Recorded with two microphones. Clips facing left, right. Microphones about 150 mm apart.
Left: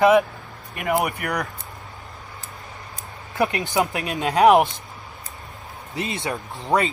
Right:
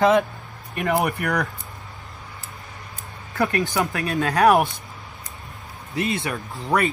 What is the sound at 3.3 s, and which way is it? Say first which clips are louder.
Speech: even; 20° left (ahead or behind).